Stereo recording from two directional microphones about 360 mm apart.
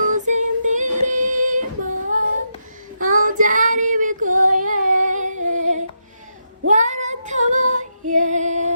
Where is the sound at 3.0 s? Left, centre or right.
Right.